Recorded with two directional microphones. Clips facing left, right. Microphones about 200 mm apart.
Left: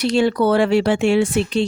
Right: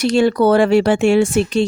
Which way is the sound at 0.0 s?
45° right (ahead or behind).